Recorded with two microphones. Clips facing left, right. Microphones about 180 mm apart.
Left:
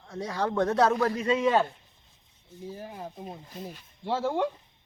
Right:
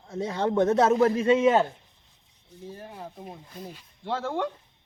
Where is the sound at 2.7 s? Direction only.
10° left (ahead or behind).